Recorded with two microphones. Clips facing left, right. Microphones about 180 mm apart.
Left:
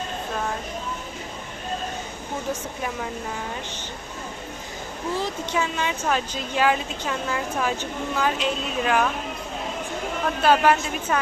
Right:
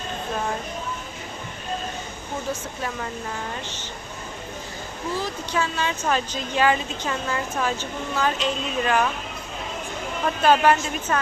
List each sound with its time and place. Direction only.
5.1 s a woman's voice: 25° left (ahead or behind)
6.1 s a woman's voice: 5° left (ahead or behind)
10.4 s a woman's voice: 5° left (ahead or behind)